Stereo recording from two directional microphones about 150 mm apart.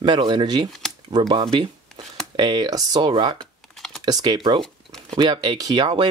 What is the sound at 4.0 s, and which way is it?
Speech, 30° right (ahead or behind).